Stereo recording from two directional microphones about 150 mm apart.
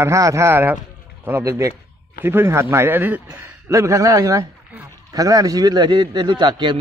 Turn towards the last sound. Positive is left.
turn(degrees=-30)  # may be behind; listen again after turning